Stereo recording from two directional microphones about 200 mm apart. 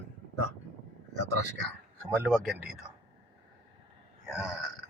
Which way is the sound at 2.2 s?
Centre (ahead or behind).